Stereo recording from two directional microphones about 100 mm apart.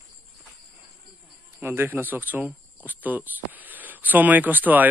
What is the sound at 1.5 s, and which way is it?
Speech, 20° right (ahead or behind).